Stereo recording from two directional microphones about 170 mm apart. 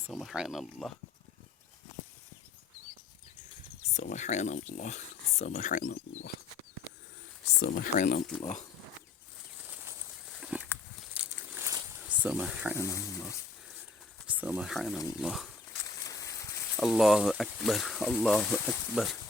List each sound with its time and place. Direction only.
0.1 s speech: centre (ahead or behind)
3.9 s speech: 45° left (ahead or behind)
7.9 s speech: 45° left (ahead or behind)
9.6 s a sound: 10° right (ahead or behind)
12.7 s speech: 15° left (ahead or behind)
14.3 s speech: 10° right (ahead or behind)
15.9 s a sound: 20° left (ahead or behind)
16.7 s speech: centre (ahead or behind)